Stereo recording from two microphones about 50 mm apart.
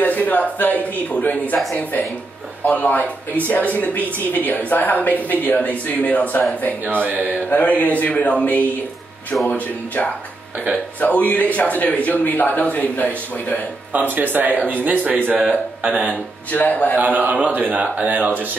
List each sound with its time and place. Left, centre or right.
0.0 s speech: left
6.9 s speech: right
7.4 s speech: left
11.0 s speech: left
13.9 s speech: right
16.5 s speech: left
17.0 s speech: right